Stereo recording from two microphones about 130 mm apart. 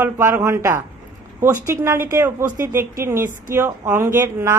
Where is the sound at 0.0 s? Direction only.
15° right (ahead or behind).